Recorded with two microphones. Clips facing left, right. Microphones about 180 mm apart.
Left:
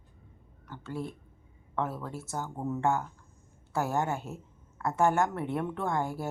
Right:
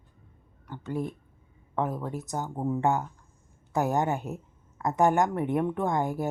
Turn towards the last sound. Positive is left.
turn(degrees=-15)  # may be behind; listen again after turning